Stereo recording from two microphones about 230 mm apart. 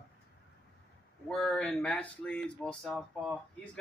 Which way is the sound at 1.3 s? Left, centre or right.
Centre.